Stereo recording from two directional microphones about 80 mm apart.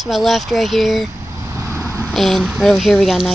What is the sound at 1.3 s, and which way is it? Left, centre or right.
Vehicle, right.